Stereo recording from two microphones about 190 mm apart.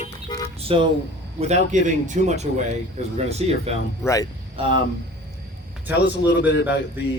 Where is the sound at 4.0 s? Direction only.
15° left (ahead or behind).